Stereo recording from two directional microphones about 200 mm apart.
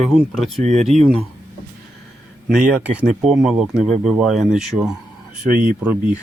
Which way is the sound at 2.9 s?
Centre (ahead or behind).